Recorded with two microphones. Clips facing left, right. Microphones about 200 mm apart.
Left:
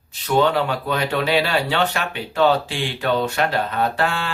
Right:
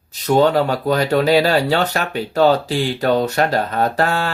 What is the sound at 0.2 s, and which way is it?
Speech, 40° right (ahead or behind).